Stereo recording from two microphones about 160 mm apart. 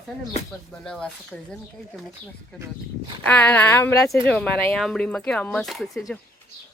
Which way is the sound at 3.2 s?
10° left (ahead or behind).